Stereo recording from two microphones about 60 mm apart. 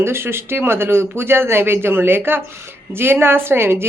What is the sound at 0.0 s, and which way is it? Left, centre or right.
A woman's voice, right.